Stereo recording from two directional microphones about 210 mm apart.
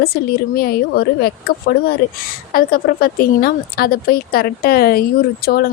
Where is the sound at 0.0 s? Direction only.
45° left (ahead or behind).